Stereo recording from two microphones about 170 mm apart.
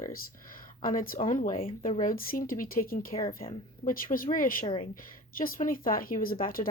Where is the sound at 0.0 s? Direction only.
55° left (ahead or behind).